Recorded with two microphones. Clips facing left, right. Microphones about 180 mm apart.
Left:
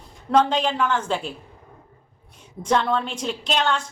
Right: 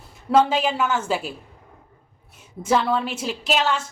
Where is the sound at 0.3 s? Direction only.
5° right (ahead or behind).